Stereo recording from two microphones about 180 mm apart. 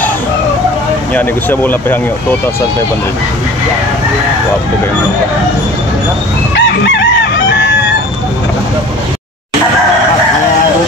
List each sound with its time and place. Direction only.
1.1 s speech: 10° left (ahead or behind)
6.5 s chicken: 75° left (ahead or behind)